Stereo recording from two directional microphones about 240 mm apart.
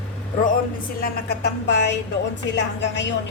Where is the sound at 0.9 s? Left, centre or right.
Left.